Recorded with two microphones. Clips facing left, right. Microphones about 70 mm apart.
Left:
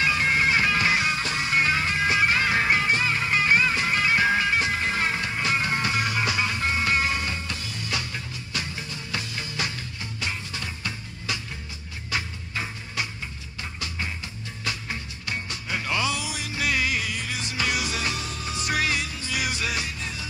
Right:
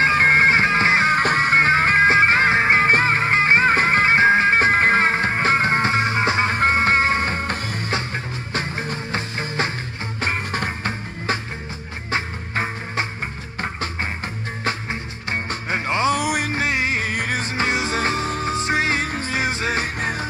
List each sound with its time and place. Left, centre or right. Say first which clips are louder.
0.0 s music: right 7 dB; right
10.2 s music: right 9 dB; right
14.6 s music: right 6 dB; right
16.2 s music: right 10 dB; right
16.6 s music: right 4 dB; right
17.1 s music: right 8 dB; right